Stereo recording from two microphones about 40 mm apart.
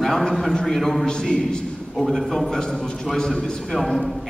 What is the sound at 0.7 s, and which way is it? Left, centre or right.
A man's voice, centre.